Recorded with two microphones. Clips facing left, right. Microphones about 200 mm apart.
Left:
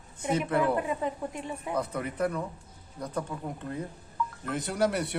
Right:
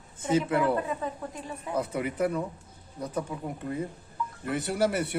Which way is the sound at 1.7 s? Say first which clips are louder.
Right 3 dB; 10° right (ahead or behind).